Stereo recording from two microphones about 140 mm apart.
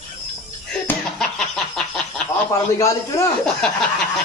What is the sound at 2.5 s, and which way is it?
Speech, 20° left (ahead or behind).